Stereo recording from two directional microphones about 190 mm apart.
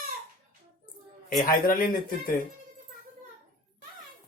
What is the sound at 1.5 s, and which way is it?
Speech, 50° left (ahead or behind).